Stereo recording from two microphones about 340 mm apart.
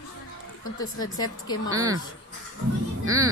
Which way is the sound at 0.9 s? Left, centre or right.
Left.